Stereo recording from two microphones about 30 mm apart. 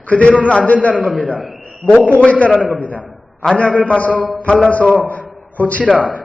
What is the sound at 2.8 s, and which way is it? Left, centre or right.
Speech, right.